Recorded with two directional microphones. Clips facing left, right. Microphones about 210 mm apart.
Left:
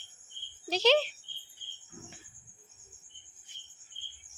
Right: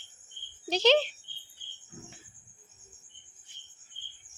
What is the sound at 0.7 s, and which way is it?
Speech, 5° left (ahead or behind).